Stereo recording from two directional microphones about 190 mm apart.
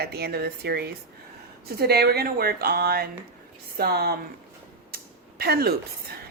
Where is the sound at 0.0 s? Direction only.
55° right (ahead or behind).